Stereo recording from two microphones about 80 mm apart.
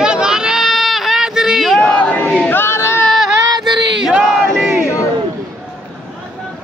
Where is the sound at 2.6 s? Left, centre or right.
Left.